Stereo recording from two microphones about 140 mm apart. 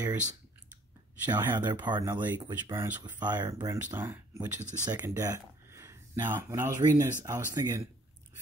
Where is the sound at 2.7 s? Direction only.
20° right (ahead or behind).